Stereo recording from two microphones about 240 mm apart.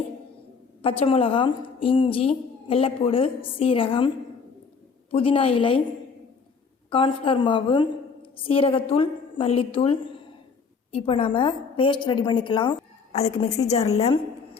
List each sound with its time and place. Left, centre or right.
0.8 s a woman's voice: left
5.1 s a woman's voice: left
6.9 s a woman's voice: left